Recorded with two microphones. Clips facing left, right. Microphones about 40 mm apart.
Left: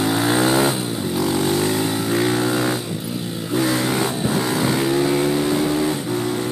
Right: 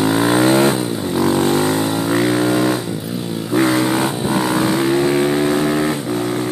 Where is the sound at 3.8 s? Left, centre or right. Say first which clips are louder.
Right 3 dB; centre.